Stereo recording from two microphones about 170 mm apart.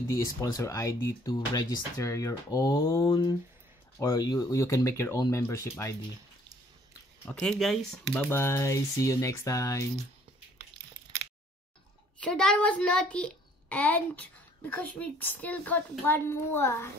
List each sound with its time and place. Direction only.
0.1 s speech: 20° left (ahead or behind)
3.1 s a child's voice: 25° left (ahead or behind)
7.2 s a child's voice: 5° left (ahead or behind)
12.2 s a child's voice: 5° left (ahead or behind)